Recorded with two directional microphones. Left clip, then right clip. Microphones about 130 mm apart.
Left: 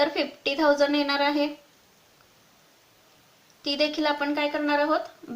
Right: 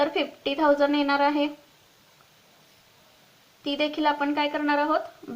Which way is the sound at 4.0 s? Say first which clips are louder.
Right 1 dB; 35° right (ahead or behind).